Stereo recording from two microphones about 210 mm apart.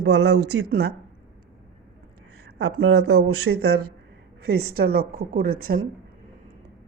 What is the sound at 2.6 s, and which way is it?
Speech, 85° right.